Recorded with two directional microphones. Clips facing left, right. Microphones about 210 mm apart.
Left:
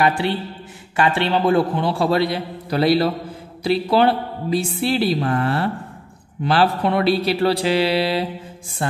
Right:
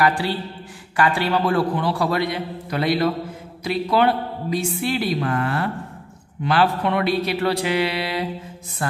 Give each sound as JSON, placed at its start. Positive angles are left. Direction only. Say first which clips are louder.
{"t": 0.0, "sound": "a man's voice", "louder": "left 1 dB", "side_deg": 25}